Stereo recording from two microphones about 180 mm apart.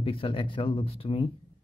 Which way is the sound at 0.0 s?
30° left (ahead or behind).